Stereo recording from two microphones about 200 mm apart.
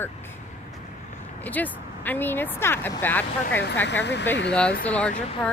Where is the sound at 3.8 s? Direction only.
60° left (ahead or behind).